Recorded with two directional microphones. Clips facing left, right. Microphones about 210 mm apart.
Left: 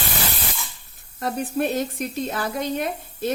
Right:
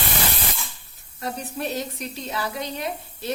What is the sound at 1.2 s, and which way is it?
A woman's voice, 55° left (ahead or behind).